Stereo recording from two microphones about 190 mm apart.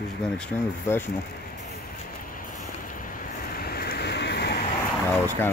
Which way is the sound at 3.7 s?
55° left (ahead or behind).